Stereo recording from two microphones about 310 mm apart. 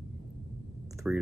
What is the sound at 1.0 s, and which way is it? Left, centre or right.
Speech, centre.